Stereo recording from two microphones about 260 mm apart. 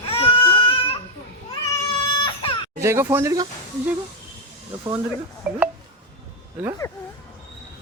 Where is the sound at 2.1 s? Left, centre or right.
Centre.